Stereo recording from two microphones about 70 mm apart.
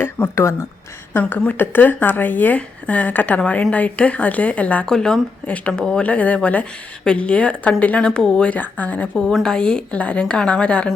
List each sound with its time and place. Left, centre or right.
0.2 s a woman's voice: centre
1.1 s a woman's voice: left
4.9 s a woman's voice: centre
9.1 s a woman's voice: centre